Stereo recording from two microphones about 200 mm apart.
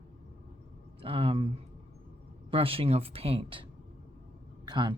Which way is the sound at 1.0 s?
30° right (ahead or behind).